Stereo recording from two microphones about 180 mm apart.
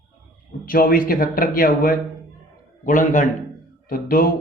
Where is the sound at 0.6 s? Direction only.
55° left (ahead or behind).